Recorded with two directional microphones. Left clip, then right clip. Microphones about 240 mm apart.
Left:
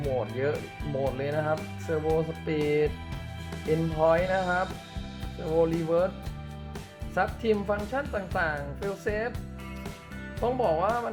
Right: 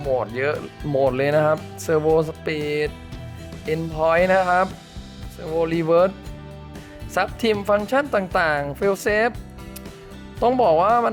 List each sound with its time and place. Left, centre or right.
0.4 s speech: right
7.1 s speech: right
10.4 s speech: right